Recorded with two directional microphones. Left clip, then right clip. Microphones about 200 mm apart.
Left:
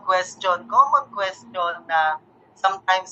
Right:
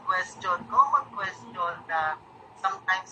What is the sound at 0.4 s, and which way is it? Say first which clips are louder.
A woman's voice: left 4 dB; 15° left (ahead or behind).